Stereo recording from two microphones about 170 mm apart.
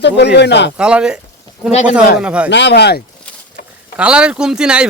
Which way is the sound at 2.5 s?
90° left.